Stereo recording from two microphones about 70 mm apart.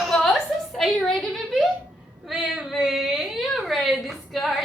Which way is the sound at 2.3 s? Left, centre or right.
Centre.